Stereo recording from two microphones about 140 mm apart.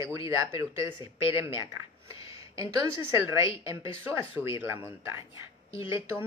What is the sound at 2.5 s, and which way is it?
A man's voice, 25° right (ahead or behind).